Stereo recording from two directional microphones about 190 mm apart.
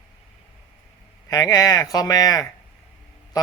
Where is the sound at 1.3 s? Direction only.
15° left (ahead or behind).